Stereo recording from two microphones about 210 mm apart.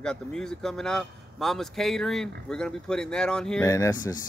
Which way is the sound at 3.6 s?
15° left (ahead or behind).